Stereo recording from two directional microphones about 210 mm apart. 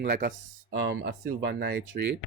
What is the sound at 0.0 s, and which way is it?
Speech, 45° right (ahead or behind).